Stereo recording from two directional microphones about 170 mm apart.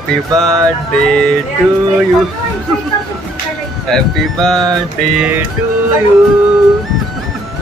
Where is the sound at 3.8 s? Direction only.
5° left (ahead or behind).